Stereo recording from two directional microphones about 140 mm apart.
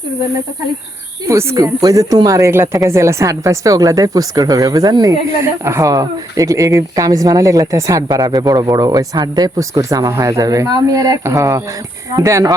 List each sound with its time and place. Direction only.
1.3 s speech: 20° right (ahead or behind)